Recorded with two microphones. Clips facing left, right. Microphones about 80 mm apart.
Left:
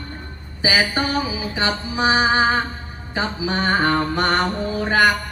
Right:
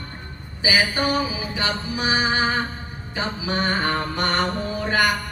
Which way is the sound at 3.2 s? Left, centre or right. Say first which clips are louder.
Left 3 dB; left.